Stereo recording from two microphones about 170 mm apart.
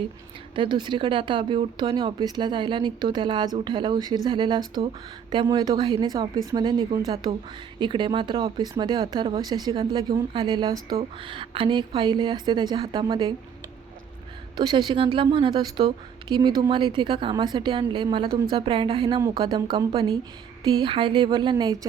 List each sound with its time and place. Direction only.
0.5 s speech: 30° right (ahead or behind)
14.5 s speech: 25° right (ahead or behind)